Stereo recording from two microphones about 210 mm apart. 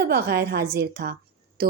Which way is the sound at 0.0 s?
50° right (ahead or behind).